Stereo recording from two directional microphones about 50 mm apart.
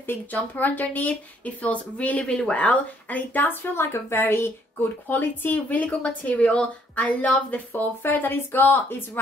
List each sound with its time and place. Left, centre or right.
0.0 s speech: left
0.4 s speech: left
5.0 s speech: left; by 7.1 s centre
7.1 s speech: left